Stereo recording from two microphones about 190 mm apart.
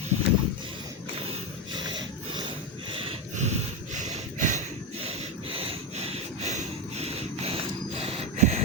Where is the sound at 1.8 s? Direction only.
25° right (ahead or behind).